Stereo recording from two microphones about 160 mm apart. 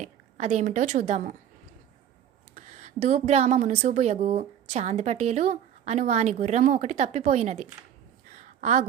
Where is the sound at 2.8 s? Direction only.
45° right (ahead or behind).